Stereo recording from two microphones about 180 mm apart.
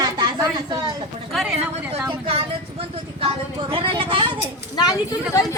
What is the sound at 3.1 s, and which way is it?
A woman's voice, 30° right (ahead or behind).